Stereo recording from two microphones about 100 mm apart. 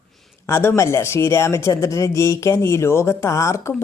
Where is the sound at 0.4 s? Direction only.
25° left (ahead or behind).